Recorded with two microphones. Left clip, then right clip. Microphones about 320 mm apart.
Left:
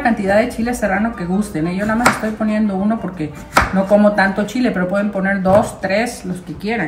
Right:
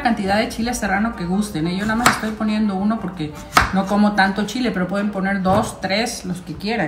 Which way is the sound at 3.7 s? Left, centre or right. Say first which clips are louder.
Left 6 dB; centre.